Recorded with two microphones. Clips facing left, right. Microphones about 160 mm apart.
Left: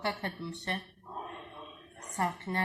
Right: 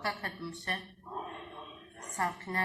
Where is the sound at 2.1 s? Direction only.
25° left (ahead or behind).